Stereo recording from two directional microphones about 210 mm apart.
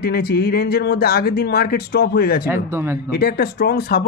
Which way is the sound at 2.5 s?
10° right (ahead or behind).